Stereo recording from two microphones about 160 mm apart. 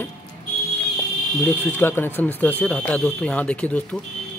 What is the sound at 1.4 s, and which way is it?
Speech, 15° left (ahead or behind).